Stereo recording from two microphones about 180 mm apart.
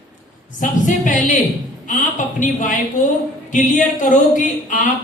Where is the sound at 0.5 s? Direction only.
45° left (ahead or behind).